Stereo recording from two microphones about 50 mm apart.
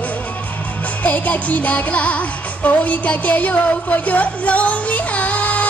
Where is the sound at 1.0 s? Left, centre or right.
Left.